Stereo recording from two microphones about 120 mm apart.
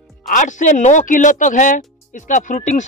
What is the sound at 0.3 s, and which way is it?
Speech, 90° left.